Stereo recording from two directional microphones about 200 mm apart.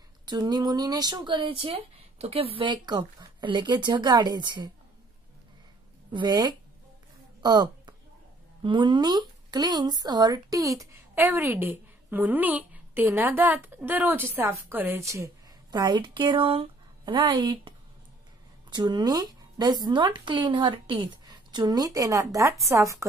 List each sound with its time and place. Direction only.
0.2 s speech: 20° right (ahead or behind)
6.1 s speech: 20° right (ahead or behind)